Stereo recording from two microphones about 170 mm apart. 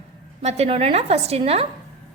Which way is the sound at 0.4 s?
40° right (ahead or behind).